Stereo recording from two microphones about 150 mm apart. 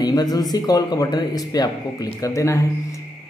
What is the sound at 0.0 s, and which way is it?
A man's voice, 25° left (ahead or behind).